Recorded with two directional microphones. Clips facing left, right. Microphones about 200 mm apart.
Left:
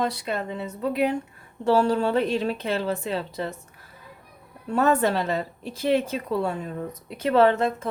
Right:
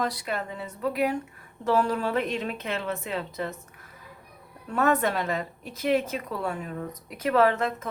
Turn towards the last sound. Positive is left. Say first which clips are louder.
# left 3 dB
turn(degrees=30)  # may be behind; listen again after turning